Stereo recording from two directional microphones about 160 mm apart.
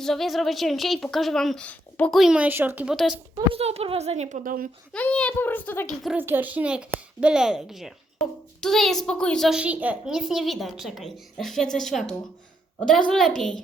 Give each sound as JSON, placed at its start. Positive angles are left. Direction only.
{"t": 0.0, "sound": "a woman's voice", "side_deg": 0}
{"t": 2.9, "sound": "a woman's voice", "side_deg": 0}
{"t": 3.5, "sound": "a woman's voice", "side_deg": -40}
{"t": 4.9, "sound": "a child's voice", "side_deg": 10}
{"t": 6.1, "sound": "a woman's voice", "side_deg": -10}